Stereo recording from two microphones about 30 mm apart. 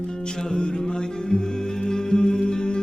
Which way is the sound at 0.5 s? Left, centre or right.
Left.